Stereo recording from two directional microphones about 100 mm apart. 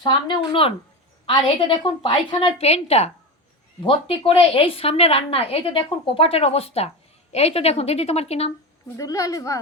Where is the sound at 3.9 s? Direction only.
70° left (ahead or behind); by 8.5 s 90° left.